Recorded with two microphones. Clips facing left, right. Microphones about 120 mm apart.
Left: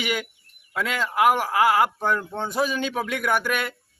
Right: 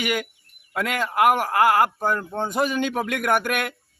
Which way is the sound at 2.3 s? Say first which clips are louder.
Right 3 dB; 15° right (ahead or behind).